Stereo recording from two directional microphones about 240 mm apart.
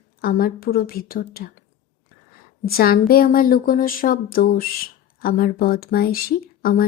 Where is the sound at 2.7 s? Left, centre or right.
Left.